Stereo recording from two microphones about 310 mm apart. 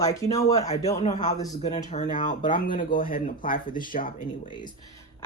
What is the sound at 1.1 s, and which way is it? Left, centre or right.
Speech, left.